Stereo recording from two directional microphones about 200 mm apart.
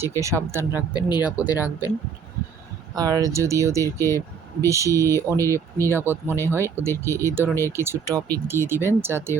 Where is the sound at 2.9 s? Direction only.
20° right (ahead or behind).